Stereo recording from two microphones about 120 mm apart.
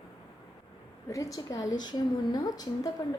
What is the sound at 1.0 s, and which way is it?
A woman's voice, 30° left (ahead or behind).